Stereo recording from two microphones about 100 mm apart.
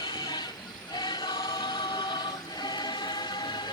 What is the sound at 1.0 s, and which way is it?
Choir, 50° left (ahead or behind).